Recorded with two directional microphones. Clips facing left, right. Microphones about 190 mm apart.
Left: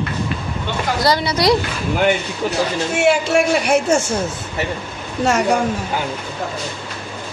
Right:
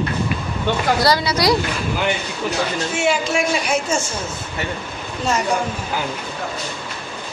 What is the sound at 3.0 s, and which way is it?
A man's voice, 65° left (ahead or behind).